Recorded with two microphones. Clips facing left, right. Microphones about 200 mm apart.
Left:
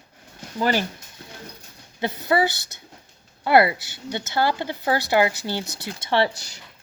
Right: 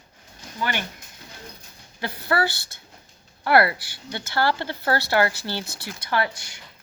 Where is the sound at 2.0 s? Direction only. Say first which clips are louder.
Left 3 dB; 20° left (ahead or behind).